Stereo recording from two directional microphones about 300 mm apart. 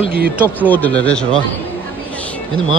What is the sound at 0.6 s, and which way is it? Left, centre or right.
Speech, centre.